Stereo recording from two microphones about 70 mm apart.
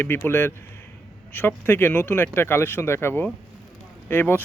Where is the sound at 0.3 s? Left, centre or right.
Left.